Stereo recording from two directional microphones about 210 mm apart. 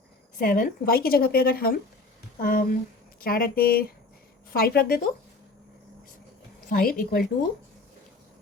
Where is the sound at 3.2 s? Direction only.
45° left (ahead or behind).